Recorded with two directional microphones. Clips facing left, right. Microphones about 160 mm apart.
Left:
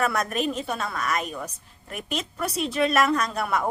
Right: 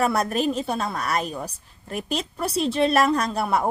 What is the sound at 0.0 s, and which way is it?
A woman's voice, 30° right (ahead or behind).